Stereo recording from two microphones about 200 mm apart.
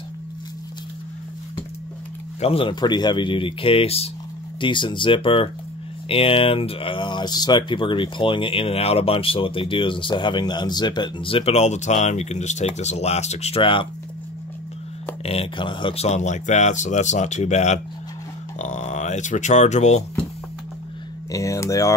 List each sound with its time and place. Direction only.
2.4 s speech: 25° left (ahead or behind)
15.2 s speech: 30° left (ahead or behind)
21.3 s speech: 15° left (ahead or behind)